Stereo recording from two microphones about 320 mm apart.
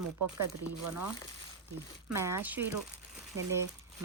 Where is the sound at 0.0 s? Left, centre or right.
Right.